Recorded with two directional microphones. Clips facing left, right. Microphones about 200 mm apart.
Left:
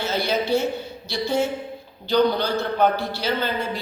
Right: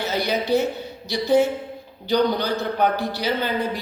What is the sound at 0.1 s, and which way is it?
A woman's voice, 15° right (ahead or behind).